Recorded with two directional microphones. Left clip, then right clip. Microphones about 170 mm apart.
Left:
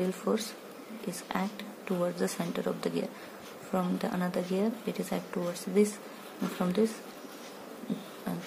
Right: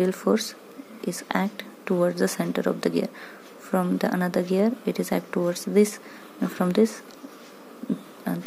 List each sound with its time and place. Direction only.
0.0 s a woman's voice: 35° right (ahead or behind)
8.3 s music: 35° right (ahead or behind)